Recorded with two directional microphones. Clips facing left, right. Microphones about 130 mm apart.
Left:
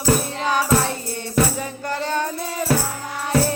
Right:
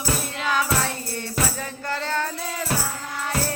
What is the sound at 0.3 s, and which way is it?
Music, 20° left (ahead or behind).